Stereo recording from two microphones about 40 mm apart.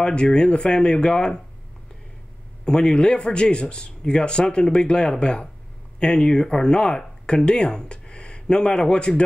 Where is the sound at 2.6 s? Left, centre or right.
Left.